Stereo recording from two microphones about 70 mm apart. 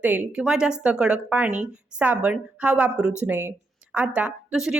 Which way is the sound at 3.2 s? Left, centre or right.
Right.